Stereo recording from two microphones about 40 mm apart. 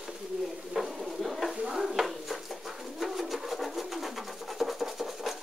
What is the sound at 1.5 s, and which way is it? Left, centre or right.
Stir, right.